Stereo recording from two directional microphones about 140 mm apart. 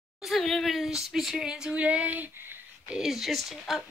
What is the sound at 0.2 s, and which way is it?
Speech, centre (ahead or behind).